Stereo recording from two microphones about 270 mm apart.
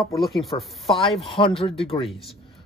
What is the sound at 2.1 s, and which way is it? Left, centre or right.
Speech, centre.